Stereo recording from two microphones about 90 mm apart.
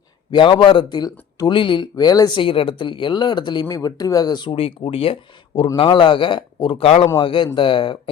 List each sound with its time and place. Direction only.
0.3 s speech: 65° left (ahead or behind)
1.5 s speech: 65° left (ahead or behind)
2.4 s speech: 85° left; by 4.5 s 50° left (ahead or behind)
4.5 s speech: 90° left
5.7 s a man's voice: 75° left (ahead or behind)